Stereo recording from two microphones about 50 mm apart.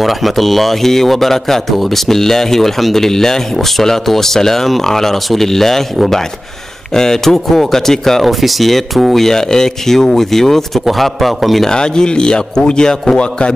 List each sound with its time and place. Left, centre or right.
0.0 s speech: centre
11.7 s speech: centre